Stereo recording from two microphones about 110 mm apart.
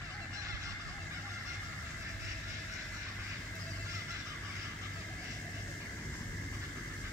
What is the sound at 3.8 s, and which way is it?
Fowl, 25° right (ahead or behind).